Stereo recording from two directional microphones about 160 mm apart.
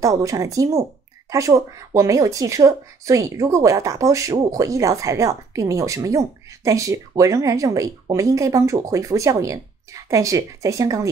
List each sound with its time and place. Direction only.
0.0 s a woman's voice: 20° right (ahead or behind)